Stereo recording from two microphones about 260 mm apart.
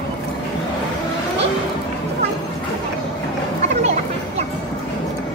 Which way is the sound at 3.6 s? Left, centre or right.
Right.